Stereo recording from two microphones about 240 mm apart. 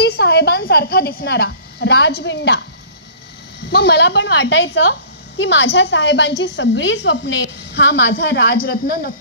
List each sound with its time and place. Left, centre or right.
0.0 s a woman's voice: left
3.7 s a woman's voice: left